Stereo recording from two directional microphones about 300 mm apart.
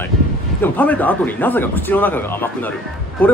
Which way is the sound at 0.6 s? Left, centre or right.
Centre.